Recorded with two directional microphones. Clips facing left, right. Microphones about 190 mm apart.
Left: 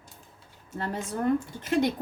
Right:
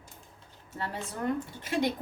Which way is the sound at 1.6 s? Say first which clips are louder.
Left 3 dB; 50° left (ahead or behind).